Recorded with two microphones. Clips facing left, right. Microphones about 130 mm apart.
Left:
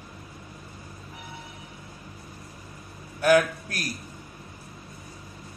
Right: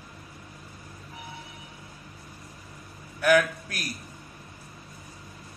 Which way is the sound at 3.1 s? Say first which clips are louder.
Left 2 dB; 30° left (ahead or behind).